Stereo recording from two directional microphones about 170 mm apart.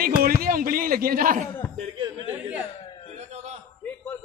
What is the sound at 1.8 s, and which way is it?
Speech, 25° right (ahead or behind).